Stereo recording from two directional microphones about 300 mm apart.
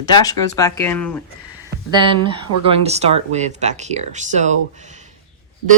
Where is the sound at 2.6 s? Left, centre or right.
Centre.